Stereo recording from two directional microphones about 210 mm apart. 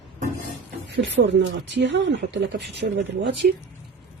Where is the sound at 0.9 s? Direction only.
60° right (ahead or behind).